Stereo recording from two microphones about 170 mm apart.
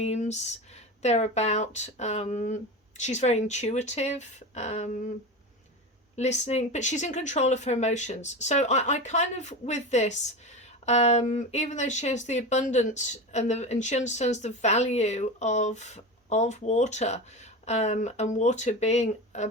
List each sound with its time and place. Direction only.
0.0 s speech: 40° left (ahead or behind)
6.1 s speech: 45° left (ahead or behind)